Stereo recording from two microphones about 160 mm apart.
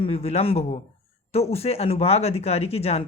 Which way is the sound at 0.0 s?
40° left (ahead or behind).